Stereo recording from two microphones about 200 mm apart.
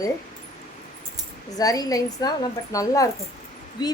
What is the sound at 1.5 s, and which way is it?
A woman's voice, 20° left (ahead or behind).